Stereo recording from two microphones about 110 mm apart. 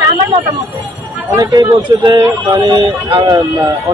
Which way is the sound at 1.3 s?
35° right (ahead or behind).